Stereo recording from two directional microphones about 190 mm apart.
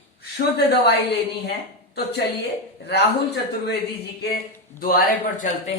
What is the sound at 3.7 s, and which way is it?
Speech, 60° left (ahead or behind).